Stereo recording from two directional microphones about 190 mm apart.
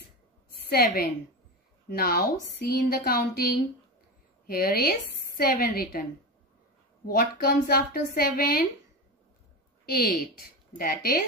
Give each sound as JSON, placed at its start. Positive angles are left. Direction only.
{"t": 0.6, "sound": "a woman's voice", "side_deg": 55}
{"t": 4.5, "sound": "a woman's voice", "side_deg": 50}
{"t": 7.1, "sound": "a woman's voice", "side_deg": 50}
{"t": 9.8, "sound": "a woman's voice", "side_deg": 50}